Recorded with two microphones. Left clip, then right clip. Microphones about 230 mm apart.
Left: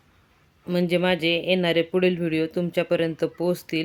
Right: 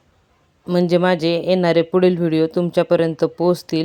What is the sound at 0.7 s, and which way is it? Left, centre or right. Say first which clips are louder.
Speech: right 6 dB; centre.